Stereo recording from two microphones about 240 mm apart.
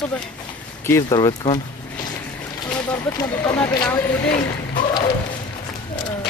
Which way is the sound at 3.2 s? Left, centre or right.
Centre.